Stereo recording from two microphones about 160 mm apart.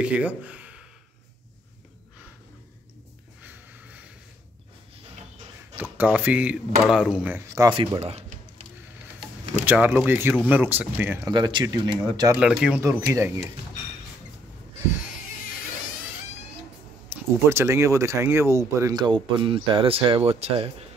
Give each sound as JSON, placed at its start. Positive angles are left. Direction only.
{"t": 0.0, "sound": "speech", "side_deg": -10}
{"t": 3.4, "sound": "a sound", "side_deg": -10}
{"t": 5.8, "sound": "speech", "side_deg": -10}
{"t": 7.7, "sound": "speech", "side_deg": -30}
{"t": 8.0, "sound": "music", "side_deg": -40}
{"t": 9.7, "sound": "speech", "side_deg": -10}
{"t": 11.2, "sound": "speech", "side_deg": -25}
{"t": 12.4, "sound": "speech", "side_deg": -5}
{"t": 12.8, "sound": "speech", "side_deg": -20}
{"t": 17.1, "sound": "speech", "side_deg": -15}